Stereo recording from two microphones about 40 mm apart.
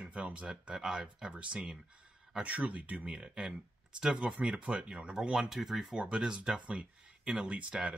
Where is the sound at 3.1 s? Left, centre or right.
Right.